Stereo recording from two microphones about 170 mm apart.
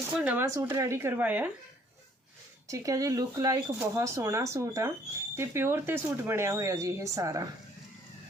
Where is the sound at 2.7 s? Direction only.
20° right (ahead or behind).